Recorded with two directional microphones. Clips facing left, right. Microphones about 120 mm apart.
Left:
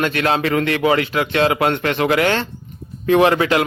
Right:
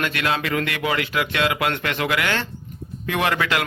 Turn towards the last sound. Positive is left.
turn(degrees=30)  # may be behind; listen again after turning